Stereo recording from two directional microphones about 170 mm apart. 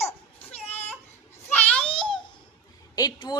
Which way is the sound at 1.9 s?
30° left (ahead or behind).